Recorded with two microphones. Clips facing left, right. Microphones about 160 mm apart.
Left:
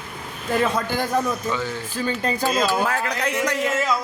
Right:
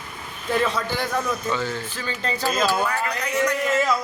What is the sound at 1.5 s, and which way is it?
Speech, 15° left (ahead or behind).